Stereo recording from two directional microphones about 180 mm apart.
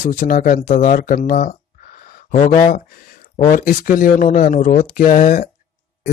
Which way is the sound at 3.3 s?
45° left (ahead or behind).